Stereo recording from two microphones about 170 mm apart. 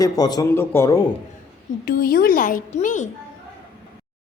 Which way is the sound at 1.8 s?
60° left (ahead or behind).